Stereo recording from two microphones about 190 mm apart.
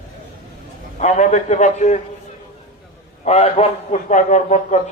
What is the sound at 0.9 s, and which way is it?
A man's voice, 40° left (ahead or behind).